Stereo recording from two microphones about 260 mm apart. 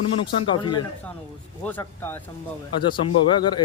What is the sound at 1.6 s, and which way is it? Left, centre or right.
Speech, centre.